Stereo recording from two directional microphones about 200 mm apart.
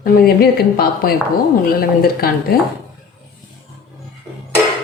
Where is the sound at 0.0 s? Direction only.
50° left (ahead or behind).